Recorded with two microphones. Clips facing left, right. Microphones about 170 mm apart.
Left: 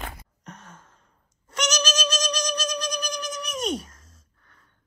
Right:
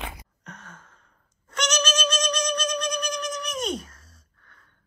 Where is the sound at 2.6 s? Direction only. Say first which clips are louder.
Right 2 dB; 30° left (ahead or behind).